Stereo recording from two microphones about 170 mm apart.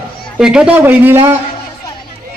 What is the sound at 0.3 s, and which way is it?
Speech, 5° right (ahead or behind).